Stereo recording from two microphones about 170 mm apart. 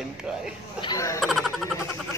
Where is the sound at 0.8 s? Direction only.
20° left (ahead or behind).